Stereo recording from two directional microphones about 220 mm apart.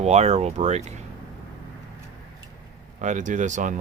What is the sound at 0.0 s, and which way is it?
Speech, 30° right (ahead or behind).